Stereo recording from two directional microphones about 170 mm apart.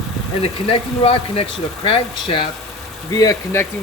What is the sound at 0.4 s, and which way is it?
Speech, 35° left (ahead or behind).